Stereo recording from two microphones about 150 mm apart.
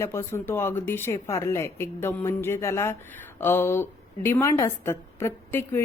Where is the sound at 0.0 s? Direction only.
20° left (ahead or behind).